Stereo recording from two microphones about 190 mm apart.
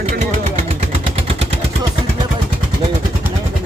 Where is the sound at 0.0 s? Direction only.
35° right (ahead or behind).